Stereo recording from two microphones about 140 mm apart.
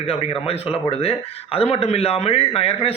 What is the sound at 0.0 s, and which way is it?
A man's voice, 45° left (ahead or behind).